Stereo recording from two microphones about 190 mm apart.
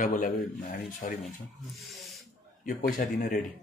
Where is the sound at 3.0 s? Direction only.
50° left (ahead or behind).